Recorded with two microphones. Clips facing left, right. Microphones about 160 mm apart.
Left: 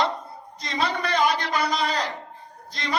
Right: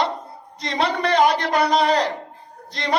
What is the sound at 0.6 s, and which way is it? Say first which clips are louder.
A woman's voice: right 4 dB; 65° right (ahead or behind).